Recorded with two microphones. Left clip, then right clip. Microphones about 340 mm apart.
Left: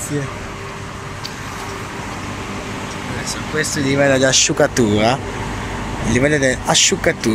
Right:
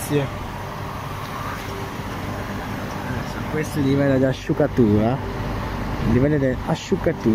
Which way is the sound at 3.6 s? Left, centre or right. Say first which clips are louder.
Left 5 dB; left.